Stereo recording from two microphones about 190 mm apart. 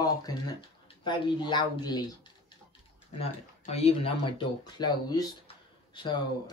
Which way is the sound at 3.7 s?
30° left (ahead or behind).